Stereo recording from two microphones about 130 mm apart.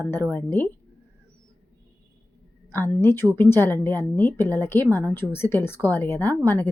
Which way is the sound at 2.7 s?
20° left (ahead or behind).